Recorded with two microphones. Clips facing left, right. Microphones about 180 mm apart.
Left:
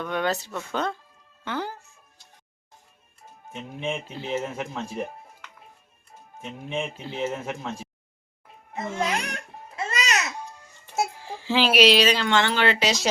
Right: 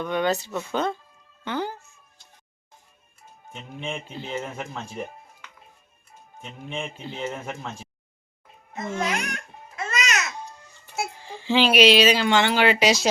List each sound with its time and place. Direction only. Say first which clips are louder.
0.0 s speech: right 2 dB; centre (ahead or behind)
1.5 s music: right 2 dB; centre (ahead or behind)
3.5 s speech: left 3 dB; 5° left (ahead or behind)
8.7 s babbling: even; 30° left (ahead or behind)
11.2 s speech: right 5 dB; 5° left (ahead or behind); by 13.0 s 10° right (ahead or behind)